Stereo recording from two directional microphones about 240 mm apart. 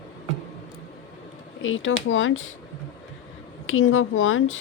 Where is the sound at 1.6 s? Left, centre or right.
Left.